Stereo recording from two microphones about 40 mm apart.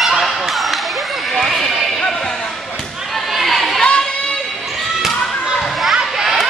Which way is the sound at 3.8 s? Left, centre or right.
Left.